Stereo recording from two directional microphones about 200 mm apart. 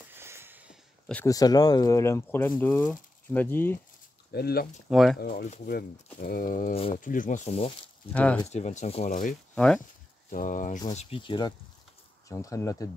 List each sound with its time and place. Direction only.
0.1 s a sound: 10° right (ahead or behind)
1.0 s speech: 5° left (ahead or behind)
1.3 s speech: 20° left (ahead or behind)
4.3 s speech: 50° left (ahead or behind)
4.8 s speech: centre (ahead or behind)
5.2 s speech: 50° left (ahead or behind); by 7.7 s 30° left (ahead or behind)
8.1 s speech: 5° left (ahead or behind)
8.5 s speech: 35° left (ahead or behind)
10.3 s speech: 40° left (ahead or behind)
10.9 s speech: 30° left (ahead or behind)